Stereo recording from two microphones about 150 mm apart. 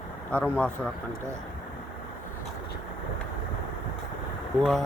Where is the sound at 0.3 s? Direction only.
10° left (ahead or behind).